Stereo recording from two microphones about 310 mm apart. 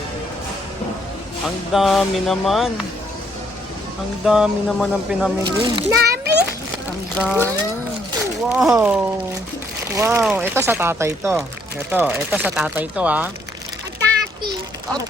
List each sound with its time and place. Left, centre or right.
1.7 s speech: centre
4.3 s speech: centre
5.4 s speech: centre
6.0 s a sound: right
7.2 s speech: centre